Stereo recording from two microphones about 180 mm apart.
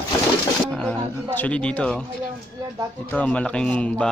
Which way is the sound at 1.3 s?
10° left (ahead or behind).